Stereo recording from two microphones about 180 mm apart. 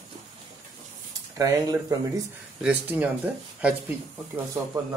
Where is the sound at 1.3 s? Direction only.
20° right (ahead or behind).